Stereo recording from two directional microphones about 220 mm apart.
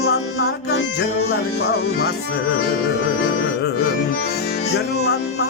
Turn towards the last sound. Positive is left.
turn(degrees=45)  # may be behind; listen again after turning